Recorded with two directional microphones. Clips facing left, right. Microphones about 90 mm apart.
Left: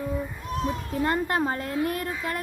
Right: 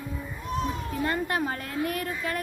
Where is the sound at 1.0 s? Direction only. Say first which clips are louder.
Left 3 dB; 35° left (ahead or behind).